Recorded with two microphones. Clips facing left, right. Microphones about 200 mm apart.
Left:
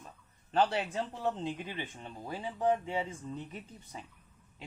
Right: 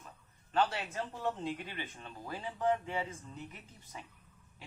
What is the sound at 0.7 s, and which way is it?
Speech, 30° left (ahead or behind).